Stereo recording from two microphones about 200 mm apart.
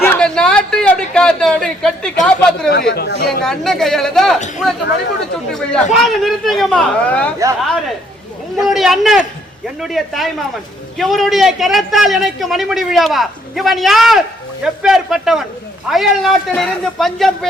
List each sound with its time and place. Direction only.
0.0 s a sound: 5° left (ahead or behind)
2.9 s speech: 50° left (ahead or behind)
3.4 s a man's voice: centre (ahead or behind)
5.9 s a man's voice: centre (ahead or behind)